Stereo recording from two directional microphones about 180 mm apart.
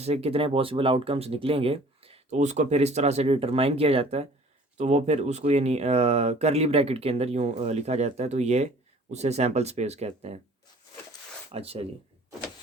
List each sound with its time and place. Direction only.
0.0 s speech: 35° right (ahead or behind)
11.5 s speech: 35° right (ahead or behind)